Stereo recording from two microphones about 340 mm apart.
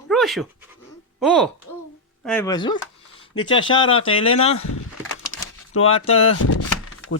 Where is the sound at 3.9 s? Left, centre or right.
Left.